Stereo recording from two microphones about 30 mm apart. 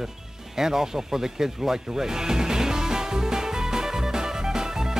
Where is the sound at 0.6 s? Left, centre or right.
Centre.